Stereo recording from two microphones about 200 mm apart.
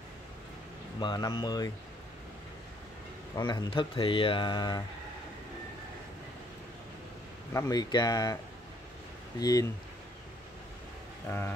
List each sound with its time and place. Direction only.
0.9 s speech: 20° left (ahead or behind)
3.3 s speech: 20° left (ahead or behind)
7.5 s speech: 15° left (ahead or behind)
9.4 s speech: 20° left (ahead or behind)
11.2 s speech: 10° left (ahead or behind)